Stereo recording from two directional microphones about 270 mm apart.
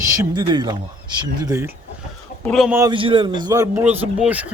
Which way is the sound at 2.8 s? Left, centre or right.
Centre.